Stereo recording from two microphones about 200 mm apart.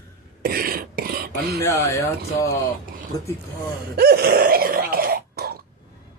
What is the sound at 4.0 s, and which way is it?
Throat clearing, 50° right (ahead or behind).